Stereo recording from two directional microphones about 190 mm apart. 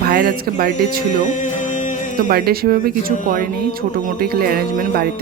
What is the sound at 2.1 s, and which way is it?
A woman's voice, 50° right (ahead or behind).